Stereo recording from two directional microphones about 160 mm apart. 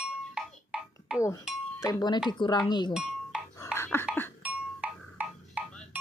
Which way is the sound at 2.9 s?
5° right (ahead or behind).